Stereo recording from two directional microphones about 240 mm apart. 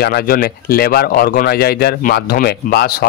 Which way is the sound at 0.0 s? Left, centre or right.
Left.